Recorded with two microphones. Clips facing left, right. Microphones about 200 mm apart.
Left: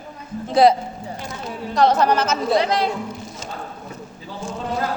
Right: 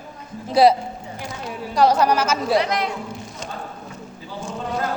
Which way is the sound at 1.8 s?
10° right (ahead or behind).